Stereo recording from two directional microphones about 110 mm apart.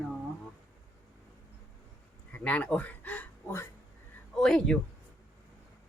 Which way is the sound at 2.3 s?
10° left (ahead or behind).